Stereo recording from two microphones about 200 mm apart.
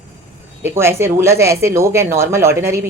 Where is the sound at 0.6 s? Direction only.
10° right (ahead or behind).